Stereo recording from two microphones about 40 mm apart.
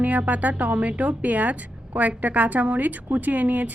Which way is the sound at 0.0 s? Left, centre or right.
Right.